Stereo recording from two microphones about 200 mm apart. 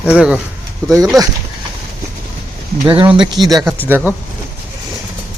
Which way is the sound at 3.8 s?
10° right (ahead or behind).